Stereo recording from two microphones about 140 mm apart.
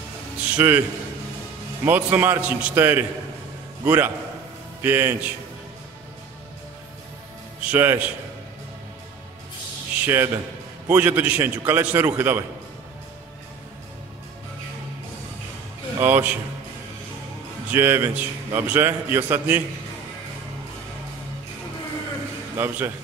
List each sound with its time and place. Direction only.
0.6 s a man's voice: 15° right (ahead or behind)
1.9 s a man's voice: 15° right (ahead or behind)
7.6 s a man's voice: 15° right (ahead or behind)
10.0 s a man's voice: 20° right (ahead or behind)
16.0 s a man's voice: 15° right (ahead or behind)
17.6 s a man's voice: 15° right (ahead or behind)
22.6 s a man's voice: 15° right (ahead or behind)